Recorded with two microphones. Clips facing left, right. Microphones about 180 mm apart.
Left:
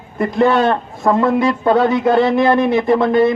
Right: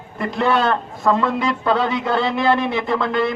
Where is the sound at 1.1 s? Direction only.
50° left (ahead or behind).